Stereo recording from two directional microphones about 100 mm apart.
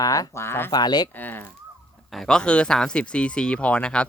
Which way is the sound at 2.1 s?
5° left (ahead or behind).